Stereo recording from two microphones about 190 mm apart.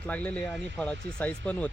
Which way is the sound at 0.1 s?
5° left (ahead or behind).